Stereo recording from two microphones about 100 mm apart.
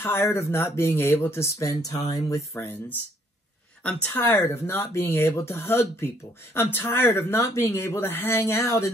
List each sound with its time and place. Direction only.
0.0 s speech: 25° left (ahead or behind)